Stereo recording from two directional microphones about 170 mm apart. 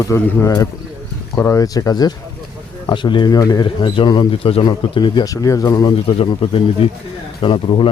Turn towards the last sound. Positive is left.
turn(degrees=30)  # may be behind; listen again after turning